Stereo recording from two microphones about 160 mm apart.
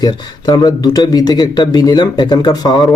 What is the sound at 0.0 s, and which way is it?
A man's voice, 25° left (ahead or behind).